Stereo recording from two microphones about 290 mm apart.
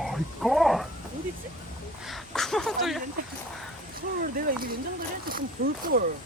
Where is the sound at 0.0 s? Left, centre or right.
Centre.